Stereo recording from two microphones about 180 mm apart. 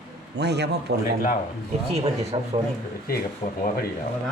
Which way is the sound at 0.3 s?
70° right (ahead or behind).